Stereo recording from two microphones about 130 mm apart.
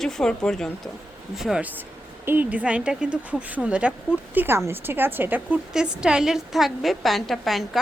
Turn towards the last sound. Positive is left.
turn(degrees=0)  # may be behind; listen again after turning